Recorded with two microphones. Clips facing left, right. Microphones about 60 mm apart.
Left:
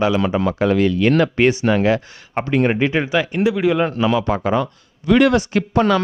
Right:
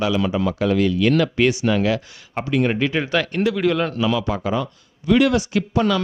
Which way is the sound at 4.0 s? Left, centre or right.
Left.